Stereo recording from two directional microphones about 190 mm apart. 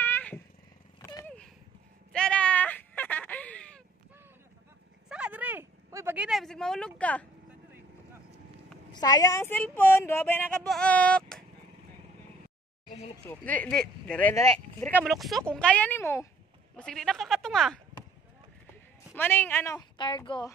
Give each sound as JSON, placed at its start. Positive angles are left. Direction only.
{"t": 0.0, "sound": "vehicle", "side_deg": 10}
{"t": 2.1, "sound": "a sound", "side_deg": 5}
{"t": 5.1, "sound": "a sound", "side_deg": -5}
{"t": 6.1, "sound": "speech", "side_deg": 0}
{"t": 8.9, "sound": "speech", "side_deg": 20}
{"t": 13.1, "sound": "speech", "side_deg": 10}
{"t": 14.3, "sound": "speech", "side_deg": 15}
{"t": 16.7, "sound": "speech", "side_deg": 5}
{"t": 19.1, "sound": "speech", "side_deg": 10}